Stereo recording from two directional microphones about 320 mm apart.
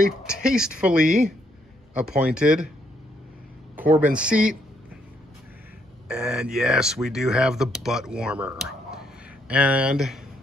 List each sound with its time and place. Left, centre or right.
0.2 s speech: centre
1.0 s speech: right
2.0 s speech: centre
3.7 s speech: centre
6.0 s speech: centre